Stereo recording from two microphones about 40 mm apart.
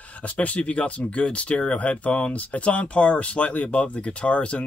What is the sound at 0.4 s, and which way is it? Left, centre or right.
Speech, left.